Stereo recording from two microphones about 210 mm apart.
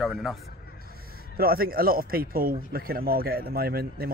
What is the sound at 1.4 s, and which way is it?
Speech, 45° right (ahead or behind).